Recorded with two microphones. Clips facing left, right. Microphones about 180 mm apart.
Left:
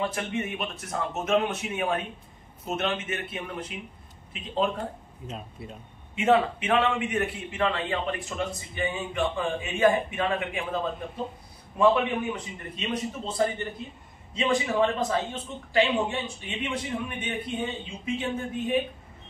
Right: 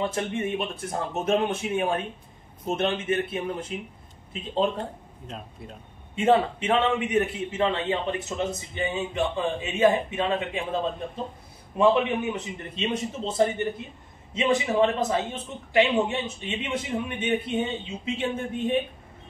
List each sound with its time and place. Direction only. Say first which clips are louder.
0.1 s a man's voice: right 3 dB; 30° right (ahead or behind)
5.2 s a man's voice: left 1 dB; centre (ahead or behind)
6.1 s a man's voice: right 1 dB; 30° right (ahead or behind)